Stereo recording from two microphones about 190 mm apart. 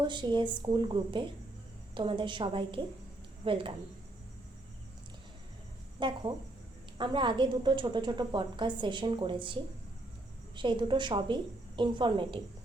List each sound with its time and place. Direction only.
0.0 s a woman's voice: 25° right (ahead or behind)
6.0 s a woman's voice: 25° right (ahead or behind)